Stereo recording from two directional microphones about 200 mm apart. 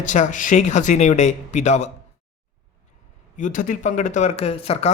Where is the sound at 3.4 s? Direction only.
40° left (ahead or behind).